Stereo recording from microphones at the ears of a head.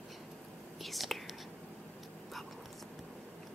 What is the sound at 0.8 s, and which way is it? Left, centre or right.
Whispering, centre.